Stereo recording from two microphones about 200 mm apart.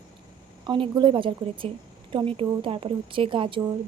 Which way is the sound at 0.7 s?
25° right (ahead or behind).